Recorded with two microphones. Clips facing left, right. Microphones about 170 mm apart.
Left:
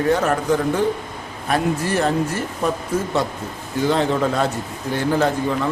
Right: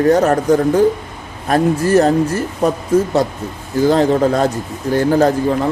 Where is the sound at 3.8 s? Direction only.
40° right (ahead or behind).